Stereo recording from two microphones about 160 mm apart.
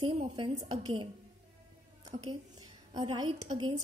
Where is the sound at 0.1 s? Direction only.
30° right (ahead or behind).